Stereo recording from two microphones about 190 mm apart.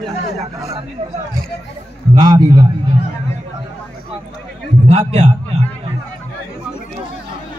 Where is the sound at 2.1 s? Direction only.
20° right (ahead or behind).